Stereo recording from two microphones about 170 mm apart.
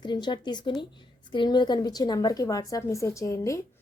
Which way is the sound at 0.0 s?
25° left (ahead or behind).